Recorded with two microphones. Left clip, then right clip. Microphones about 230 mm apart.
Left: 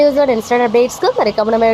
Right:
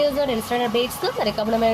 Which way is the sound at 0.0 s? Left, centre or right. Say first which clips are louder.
Left 9 dB; left.